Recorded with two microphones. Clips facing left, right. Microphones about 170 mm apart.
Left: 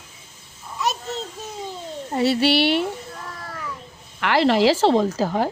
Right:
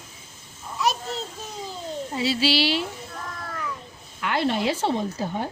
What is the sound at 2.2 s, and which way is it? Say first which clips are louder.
Speech: left 5 dB; 60° left (ahead or behind).